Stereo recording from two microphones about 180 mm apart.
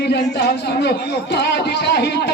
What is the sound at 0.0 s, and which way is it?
A man's voice, 65° left (ahead or behind).